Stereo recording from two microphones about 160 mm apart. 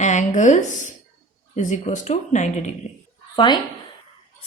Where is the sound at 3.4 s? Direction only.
25° left (ahead or behind).